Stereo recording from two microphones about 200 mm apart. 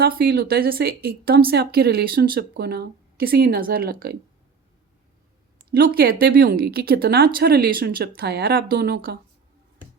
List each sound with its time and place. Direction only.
0.0 s a woman's voice: 50° right (ahead or behind)
5.7 s a woman's voice: 50° right (ahead or behind)